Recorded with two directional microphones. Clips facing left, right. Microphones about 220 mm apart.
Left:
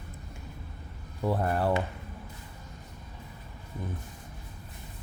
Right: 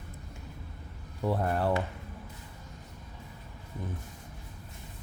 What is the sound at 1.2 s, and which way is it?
Speech, 5° left (ahead or behind).